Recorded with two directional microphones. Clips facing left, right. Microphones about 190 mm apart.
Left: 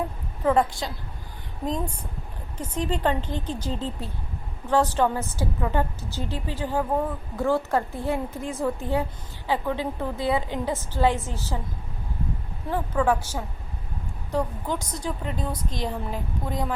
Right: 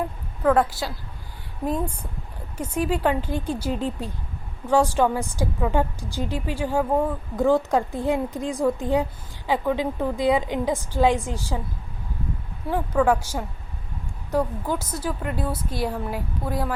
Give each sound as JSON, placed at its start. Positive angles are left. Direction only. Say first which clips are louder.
{"t": 0.5, "sound": "a woman's voice", "louder": "right 1 dB", "side_deg": -5}
{"t": 13.0, "sound": "a woman's voice", "louder": "right 3 dB", "side_deg": -10}